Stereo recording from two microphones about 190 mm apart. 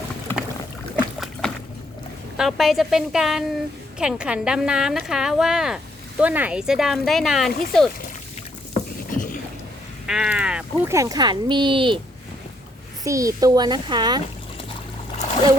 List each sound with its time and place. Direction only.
0.9 s boat: centre (ahead or behind)
2.4 s a woman's voice: centre (ahead or behind)
9.0 s rowboat: 45° left (ahead or behind)
10.1 s a woman's voice: 5° right (ahead or behind)
10.9 s a woman's voice: 20° right (ahead or behind)
13.1 s a woman's voice: 15° right (ahead or behind)